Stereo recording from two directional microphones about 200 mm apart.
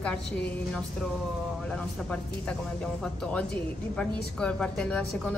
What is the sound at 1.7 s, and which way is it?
Speech, 5° left (ahead or behind).